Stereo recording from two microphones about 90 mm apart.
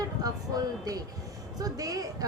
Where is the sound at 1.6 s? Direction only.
45° right (ahead or behind).